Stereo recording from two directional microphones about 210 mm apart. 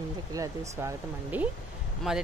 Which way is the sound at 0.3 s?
15° right (ahead or behind).